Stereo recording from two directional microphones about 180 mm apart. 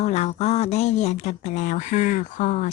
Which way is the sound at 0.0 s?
35° left (ahead or behind).